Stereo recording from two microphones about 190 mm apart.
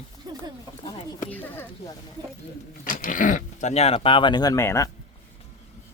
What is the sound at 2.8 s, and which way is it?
Speech, 45° left (ahead or behind).